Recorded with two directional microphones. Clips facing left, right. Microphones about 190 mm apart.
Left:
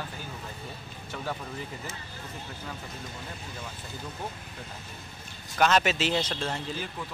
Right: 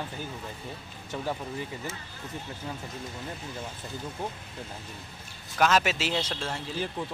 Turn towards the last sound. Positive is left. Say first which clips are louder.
# left 2 dB
turn(degrees=-5)  # may be behind; listen again after turning